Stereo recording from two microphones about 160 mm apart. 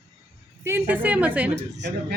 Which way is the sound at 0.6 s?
15° right (ahead or behind).